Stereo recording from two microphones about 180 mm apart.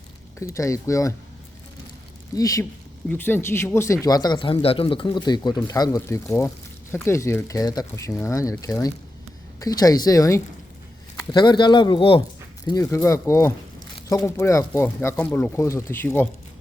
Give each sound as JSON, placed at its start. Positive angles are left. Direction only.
{"t": 0.3, "sound": "speech", "side_deg": 15}
{"t": 2.3, "sound": "speech", "side_deg": 20}